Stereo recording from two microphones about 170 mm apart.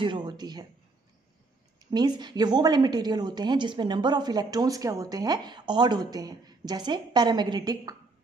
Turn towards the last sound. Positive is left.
turn(degrees=-20)  # may be behind; listen again after turning